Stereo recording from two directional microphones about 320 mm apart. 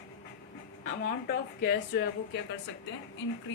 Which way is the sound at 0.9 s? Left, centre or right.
Left.